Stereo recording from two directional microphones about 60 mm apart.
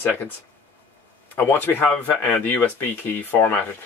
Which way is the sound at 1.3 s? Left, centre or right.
Left.